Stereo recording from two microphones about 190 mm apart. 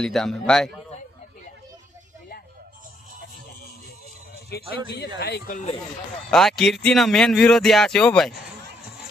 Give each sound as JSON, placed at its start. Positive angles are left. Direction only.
{"t": 0.0, "sound": "speech", "side_deg": 0}
{"t": 4.9, "sound": "speech", "side_deg": 60}
{"t": 5.5, "sound": "speech", "side_deg": 35}
{"t": 6.3, "sound": "speech", "side_deg": 0}